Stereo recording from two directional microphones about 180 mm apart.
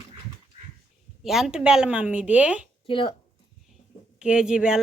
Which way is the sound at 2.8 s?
30° left (ahead or behind).